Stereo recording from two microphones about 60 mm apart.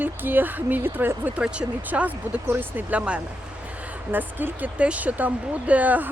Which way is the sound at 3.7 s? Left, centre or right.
Right.